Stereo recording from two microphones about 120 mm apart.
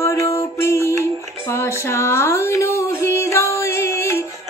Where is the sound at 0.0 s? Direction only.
25° left (ahead or behind).